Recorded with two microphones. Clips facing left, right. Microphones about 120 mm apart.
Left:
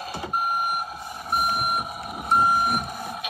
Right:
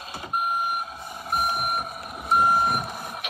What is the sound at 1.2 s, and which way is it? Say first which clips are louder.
Vehicle: left 1 dB; 5° left (ahead or behind).